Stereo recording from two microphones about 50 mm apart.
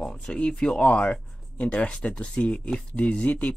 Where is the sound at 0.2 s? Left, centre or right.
Centre.